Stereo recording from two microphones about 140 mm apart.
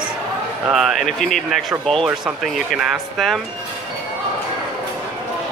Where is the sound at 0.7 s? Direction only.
Centre (ahead or behind).